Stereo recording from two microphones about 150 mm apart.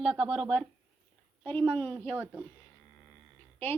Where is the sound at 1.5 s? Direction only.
10° left (ahead or behind).